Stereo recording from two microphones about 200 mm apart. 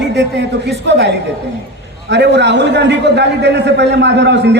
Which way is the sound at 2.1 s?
60° right (ahead or behind).